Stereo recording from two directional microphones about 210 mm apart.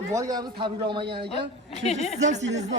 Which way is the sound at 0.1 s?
15° right (ahead or behind).